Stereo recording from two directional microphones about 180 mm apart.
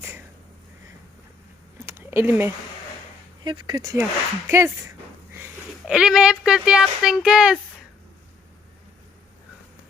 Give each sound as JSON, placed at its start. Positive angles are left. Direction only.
{"t": 1.9, "sound": "a sound", "side_deg": -15}
{"t": 3.4, "sound": "speech", "side_deg": -25}
{"t": 5.4, "sound": "speech", "side_deg": -5}